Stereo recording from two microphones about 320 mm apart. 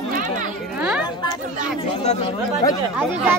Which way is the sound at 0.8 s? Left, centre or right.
Centre.